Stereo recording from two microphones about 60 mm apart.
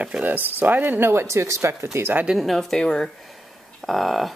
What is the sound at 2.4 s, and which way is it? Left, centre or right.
Speech, centre.